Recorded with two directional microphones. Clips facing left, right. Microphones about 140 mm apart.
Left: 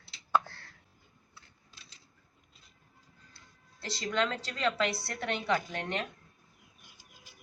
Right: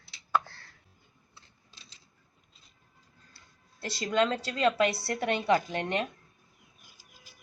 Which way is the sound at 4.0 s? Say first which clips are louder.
Right 5 dB; 20° right (ahead or behind).